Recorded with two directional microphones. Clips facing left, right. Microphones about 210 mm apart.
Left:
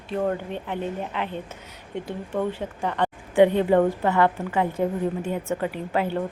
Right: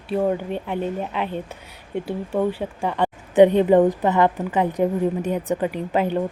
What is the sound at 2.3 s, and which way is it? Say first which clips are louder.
A woman's voice: right 4 dB; 10° right (ahead or behind).